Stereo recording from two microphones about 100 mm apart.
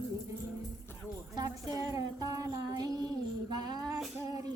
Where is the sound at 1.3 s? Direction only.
35° right (ahead or behind).